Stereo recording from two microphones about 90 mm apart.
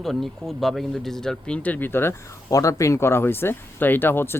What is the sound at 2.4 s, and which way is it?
Speech, 40° left (ahead or behind).